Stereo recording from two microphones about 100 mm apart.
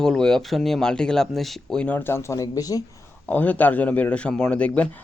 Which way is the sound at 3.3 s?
15° left (ahead or behind).